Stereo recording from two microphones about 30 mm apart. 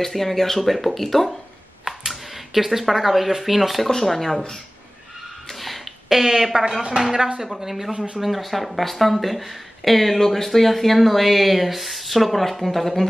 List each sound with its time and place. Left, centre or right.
0.0 s speech: centre
1.9 s speech: centre
3.8 s speech: centre
5.5 s a sound: centre
7.0 s speech: centre